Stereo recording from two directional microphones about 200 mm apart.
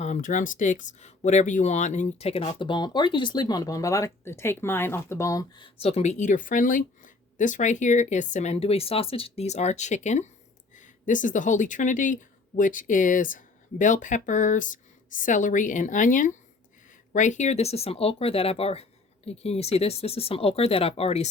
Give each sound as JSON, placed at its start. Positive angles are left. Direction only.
{"t": 0.0, "sound": "speech", "side_deg": 40}